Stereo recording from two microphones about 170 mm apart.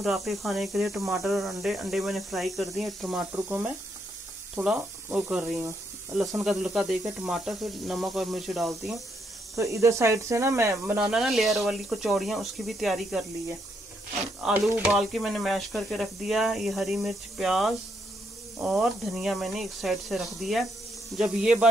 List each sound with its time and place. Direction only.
0.0 s speech: centre (ahead or behind)
6.4 s speech: centre (ahead or behind)
9.6 s speech: 15° right (ahead or behind)
11.0 s speech: 5° right (ahead or behind)
14.4 s a sound: 5° right (ahead or behind)
14.9 s speech: centre (ahead or behind)